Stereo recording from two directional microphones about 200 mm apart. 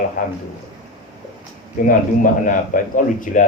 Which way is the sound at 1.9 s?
40° left (ahead or behind).